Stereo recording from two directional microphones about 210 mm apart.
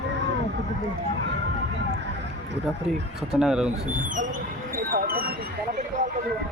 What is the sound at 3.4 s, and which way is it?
Speech, 5° right (ahead or behind).